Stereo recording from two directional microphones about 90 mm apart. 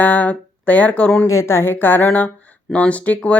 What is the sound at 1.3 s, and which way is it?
Speech, 30° left (ahead or behind).